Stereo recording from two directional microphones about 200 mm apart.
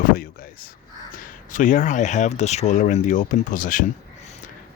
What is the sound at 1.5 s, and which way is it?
Speech, 40° left (ahead or behind).